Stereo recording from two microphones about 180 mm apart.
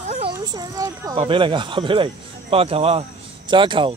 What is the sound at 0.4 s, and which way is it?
Speech, 20° right (ahead or behind).